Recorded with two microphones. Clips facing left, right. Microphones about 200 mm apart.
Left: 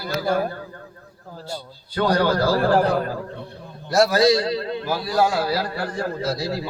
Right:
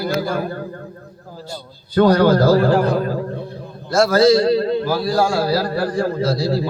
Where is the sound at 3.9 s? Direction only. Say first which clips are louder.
Right 3 dB; 15° left (ahead or behind).